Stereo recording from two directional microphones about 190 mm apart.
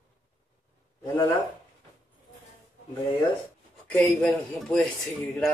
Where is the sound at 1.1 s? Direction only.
15° left (ahead or behind).